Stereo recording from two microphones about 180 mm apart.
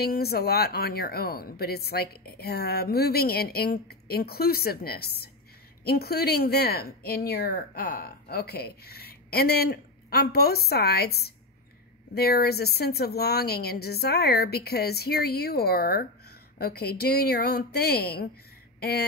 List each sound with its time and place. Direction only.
0.0 s speech: 60° left (ahead or behind)